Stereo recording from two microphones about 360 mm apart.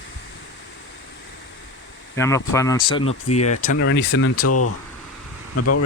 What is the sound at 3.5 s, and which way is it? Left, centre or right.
Speech, left.